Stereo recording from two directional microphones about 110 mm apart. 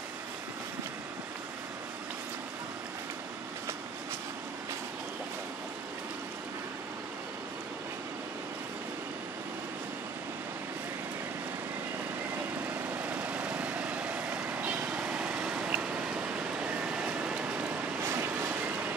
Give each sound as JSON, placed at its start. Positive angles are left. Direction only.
{"t": 12.6, "sound": "vehicle", "side_deg": -15}
{"t": 18.0, "sound": "vehicle", "side_deg": -20}